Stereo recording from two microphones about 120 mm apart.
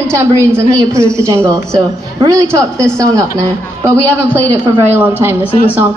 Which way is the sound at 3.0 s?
25° right (ahead or behind).